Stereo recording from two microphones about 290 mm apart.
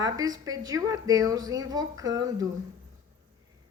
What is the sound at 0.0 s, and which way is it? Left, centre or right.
Speech, centre.